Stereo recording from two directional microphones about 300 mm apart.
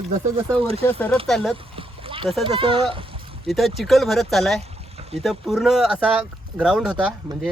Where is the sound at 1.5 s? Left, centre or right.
Centre.